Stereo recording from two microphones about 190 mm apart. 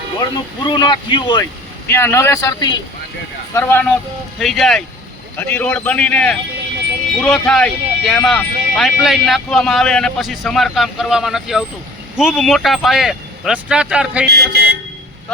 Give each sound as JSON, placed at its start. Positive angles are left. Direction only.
{"t": 0.6, "sound": "speech", "side_deg": 25}
{"t": 1.9, "sound": "a man's voice", "side_deg": 15}
{"t": 3.5, "sound": "a man's voice", "side_deg": 10}
{"t": 14.3, "sound": "speech", "side_deg": -60}